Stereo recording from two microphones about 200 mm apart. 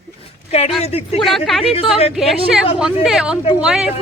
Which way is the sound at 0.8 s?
30° left (ahead or behind).